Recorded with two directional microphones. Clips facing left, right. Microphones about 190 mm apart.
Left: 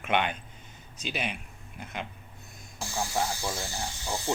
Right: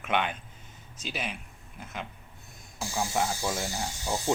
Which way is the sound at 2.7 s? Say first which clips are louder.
Right 1 dB; 15° right (ahead or behind).